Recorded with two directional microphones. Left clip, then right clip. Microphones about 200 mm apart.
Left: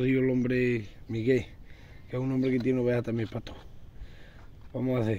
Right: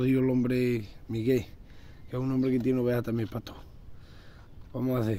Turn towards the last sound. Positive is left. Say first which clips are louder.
# left 1 dB
turn(degrees=-5)  # may be behind; listen again after turning